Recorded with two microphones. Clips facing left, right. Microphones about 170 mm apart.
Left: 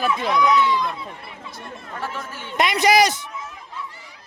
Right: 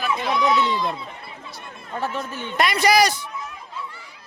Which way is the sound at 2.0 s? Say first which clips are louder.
Right 5 dB; 20° right (ahead or behind).